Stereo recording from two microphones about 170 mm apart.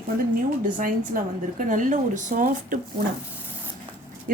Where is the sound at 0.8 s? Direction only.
55° right (ahead or behind).